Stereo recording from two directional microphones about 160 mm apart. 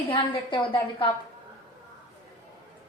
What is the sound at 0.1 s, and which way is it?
A woman's voice, 30° left (ahead or behind).